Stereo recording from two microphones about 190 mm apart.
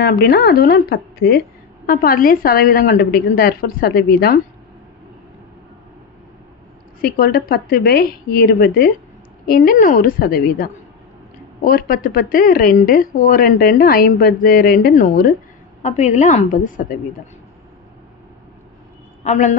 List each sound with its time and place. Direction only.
0.0 s speech: 55° left (ahead or behind)
7.0 s speech: 50° left (ahead or behind)
15.8 s a woman's voice: 35° left (ahead or behind)
19.2 s a woman's voice: 35° left (ahead or behind)